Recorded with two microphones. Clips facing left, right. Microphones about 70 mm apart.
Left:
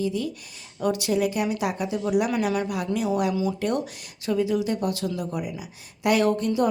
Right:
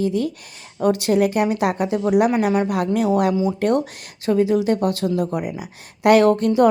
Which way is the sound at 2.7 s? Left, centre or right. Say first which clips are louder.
Right 6 dB; right.